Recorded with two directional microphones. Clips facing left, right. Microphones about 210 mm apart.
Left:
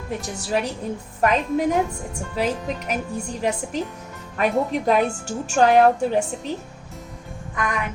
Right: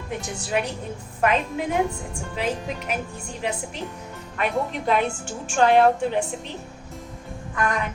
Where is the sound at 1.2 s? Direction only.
40° left (ahead or behind).